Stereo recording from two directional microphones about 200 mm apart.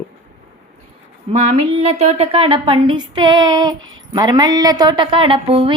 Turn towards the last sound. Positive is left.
turn(degrees=-25)  # may be behind; listen again after turning